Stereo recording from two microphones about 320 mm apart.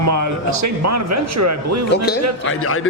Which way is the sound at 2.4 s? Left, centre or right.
Left.